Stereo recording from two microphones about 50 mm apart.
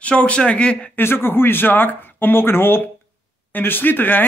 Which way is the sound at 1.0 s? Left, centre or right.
Left.